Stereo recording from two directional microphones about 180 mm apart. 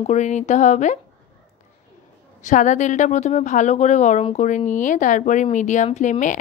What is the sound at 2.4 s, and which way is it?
A woman's voice, 45° left (ahead or behind).